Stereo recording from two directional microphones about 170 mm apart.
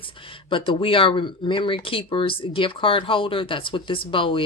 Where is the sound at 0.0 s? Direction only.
30° left (ahead or behind).